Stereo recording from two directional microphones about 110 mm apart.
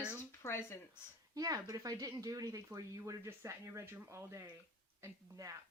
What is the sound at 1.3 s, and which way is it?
A woman's voice, 35° right (ahead or behind).